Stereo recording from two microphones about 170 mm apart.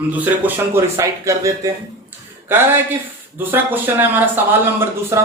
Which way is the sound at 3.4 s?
10° right (ahead or behind).